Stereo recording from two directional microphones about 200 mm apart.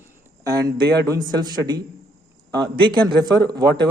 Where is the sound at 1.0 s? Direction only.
20° right (ahead or behind).